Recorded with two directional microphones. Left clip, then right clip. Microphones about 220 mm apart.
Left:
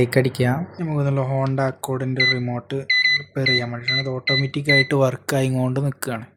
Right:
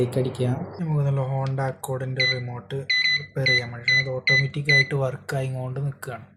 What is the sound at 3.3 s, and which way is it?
Speech, 40° left (ahead or behind).